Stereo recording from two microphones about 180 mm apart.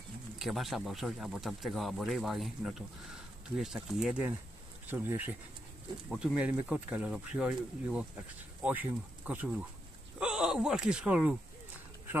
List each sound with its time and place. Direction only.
0.4 s speech: centre (ahead or behind)